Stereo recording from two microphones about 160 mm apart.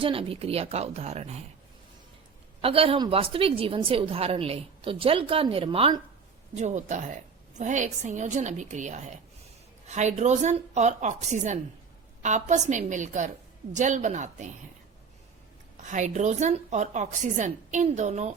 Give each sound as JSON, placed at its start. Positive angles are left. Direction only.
{"t": 0.0, "sound": "a woman's voice", "side_deg": -35}
{"t": 2.6, "sound": "a woman's voice", "side_deg": -35}
{"t": 6.6, "sound": "a woman's voice", "side_deg": -45}
{"t": 15.8, "sound": "a woman's voice", "side_deg": -50}